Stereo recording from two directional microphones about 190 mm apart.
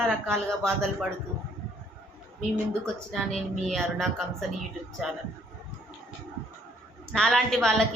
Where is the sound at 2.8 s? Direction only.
Centre (ahead or behind).